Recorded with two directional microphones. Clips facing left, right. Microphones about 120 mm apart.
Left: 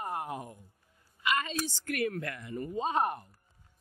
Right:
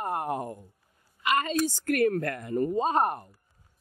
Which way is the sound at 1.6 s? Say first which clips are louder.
Right 8 dB; 45° right (ahead or behind).